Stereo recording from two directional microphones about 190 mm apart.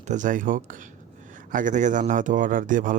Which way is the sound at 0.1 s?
40° right (ahead or behind).